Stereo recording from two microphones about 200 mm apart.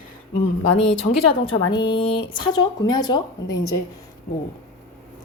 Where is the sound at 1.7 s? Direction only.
25° left (ahead or behind).